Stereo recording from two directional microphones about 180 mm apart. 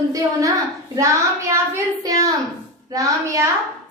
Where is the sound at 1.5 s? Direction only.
15° right (ahead or behind).